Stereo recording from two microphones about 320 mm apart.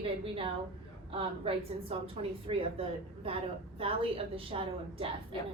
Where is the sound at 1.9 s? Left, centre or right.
Centre.